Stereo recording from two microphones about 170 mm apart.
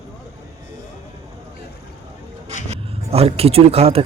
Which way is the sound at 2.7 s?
35° right (ahead or behind).